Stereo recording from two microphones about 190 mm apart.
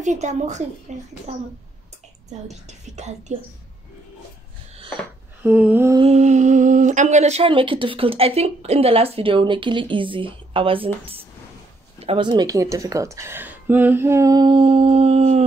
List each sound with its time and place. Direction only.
0.0 s a woman's voice: 40° right (ahead or behind)
3.0 s a woman's voice: 35° right (ahead or behind)
5.4 s speech: 10° right (ahead or behind)
5.9 s speech: 35° right (ahead or behind)